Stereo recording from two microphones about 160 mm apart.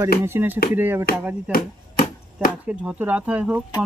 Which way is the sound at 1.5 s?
60° left (ahead or behind).